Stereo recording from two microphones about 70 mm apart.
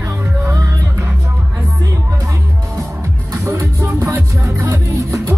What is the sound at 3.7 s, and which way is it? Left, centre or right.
Music, right.